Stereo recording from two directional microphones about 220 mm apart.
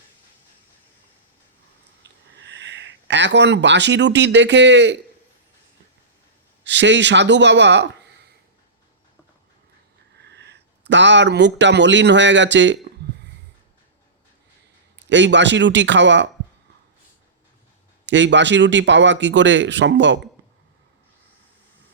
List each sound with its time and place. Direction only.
2.0 s a sound: 50° right (ahead or behind)
2.4 s speech: 55° right (ahead or behind)
6.7 s speech: 55° right (ahead or behind)
10.2 s speech: 50° right (ahead or behind)
14.9 s speech: 55° right (ahead or behind)
18.0 s speech: 55° right (ahead or behind)